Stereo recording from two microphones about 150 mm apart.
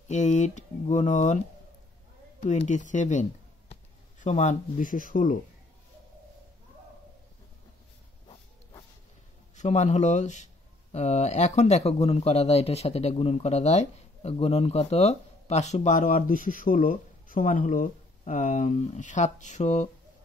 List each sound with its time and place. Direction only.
0.1 s speech: 50° left (ahead or behind)
2.4 s speech: 50° left (ahead or behind)
9.6 s speech: 50° left (ahead or behind)